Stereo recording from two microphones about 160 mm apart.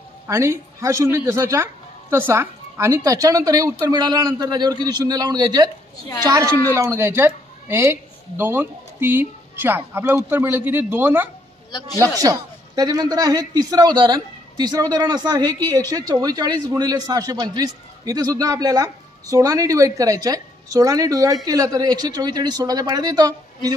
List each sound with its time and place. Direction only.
0.3 s a man's voice: 15° right (ahead or behind)
12.2 s a man's voice: 25° right (ahead or behind)